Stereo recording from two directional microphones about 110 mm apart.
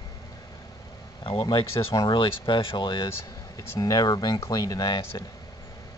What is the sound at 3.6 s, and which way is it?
Speech, 35° left (ahead or behind).